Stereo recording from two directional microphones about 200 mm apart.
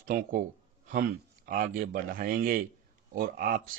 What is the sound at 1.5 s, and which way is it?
Speech, 40° right (ahead or behind).